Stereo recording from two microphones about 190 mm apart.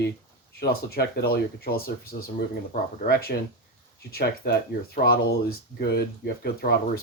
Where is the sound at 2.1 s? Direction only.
40° left (ahead or behind).